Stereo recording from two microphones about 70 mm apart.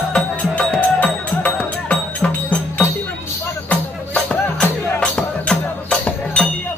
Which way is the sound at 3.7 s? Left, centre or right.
Left.